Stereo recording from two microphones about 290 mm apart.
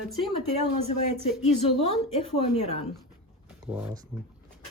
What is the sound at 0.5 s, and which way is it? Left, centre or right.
Speech, left.